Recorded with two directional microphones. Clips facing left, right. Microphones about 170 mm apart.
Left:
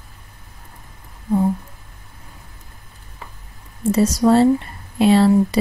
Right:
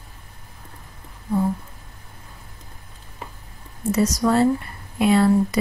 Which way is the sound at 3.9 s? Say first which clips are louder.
Left 5 dB; 30° left (ahead or behind).